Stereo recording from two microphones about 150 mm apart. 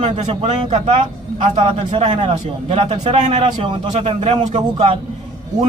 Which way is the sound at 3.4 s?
35° right (ahead or behind).